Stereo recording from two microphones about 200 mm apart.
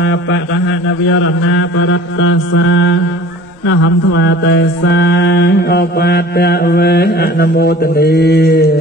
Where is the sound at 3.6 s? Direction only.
70° left (ahead or behind).